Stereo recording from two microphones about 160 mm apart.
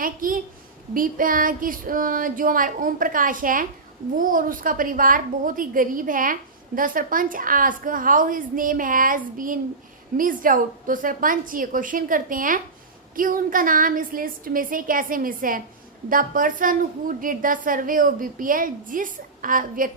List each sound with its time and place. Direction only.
0.0 s a woman's voice: 60° right (ahead or behind)